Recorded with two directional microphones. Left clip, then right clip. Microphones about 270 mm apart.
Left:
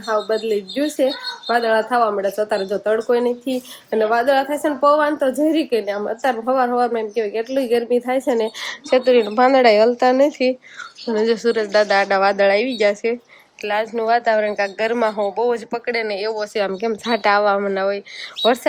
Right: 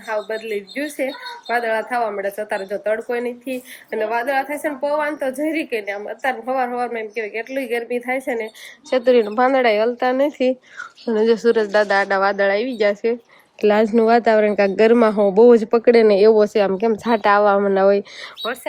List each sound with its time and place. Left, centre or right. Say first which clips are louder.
0.5 s a woman's voice: left 4 dB; centre
8.9 s speech: left 1 dB; centre
13.6 s speech: right 6 dB; centre